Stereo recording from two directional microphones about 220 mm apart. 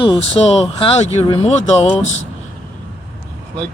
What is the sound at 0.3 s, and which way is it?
Speech, 30° left (ahead or behind).